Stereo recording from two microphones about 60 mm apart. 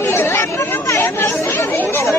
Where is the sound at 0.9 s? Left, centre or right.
Left.